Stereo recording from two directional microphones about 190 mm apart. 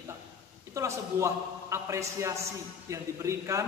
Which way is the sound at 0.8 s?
15° right (ahead or behind).